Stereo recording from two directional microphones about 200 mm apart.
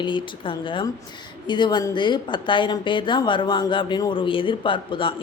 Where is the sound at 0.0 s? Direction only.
25° left (ahead or behind).